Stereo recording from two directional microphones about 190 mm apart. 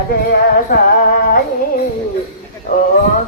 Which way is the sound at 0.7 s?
50° left (ahead or behind).